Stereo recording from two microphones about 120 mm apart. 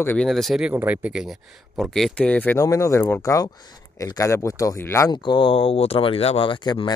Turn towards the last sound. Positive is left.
turn(degrees=40)  # may be behind; listen again after turning